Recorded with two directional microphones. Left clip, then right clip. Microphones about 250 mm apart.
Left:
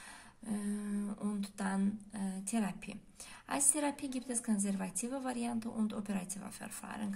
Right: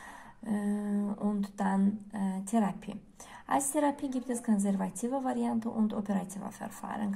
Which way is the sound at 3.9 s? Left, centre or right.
Centre.